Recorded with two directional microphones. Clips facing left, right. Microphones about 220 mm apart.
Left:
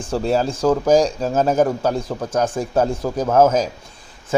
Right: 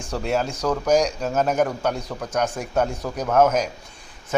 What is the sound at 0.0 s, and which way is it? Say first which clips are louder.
Speech: left 5 dB; 30° left (ahead or behind).